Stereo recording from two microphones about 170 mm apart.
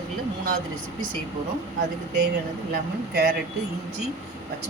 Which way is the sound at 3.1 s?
65° right (ahead or behind).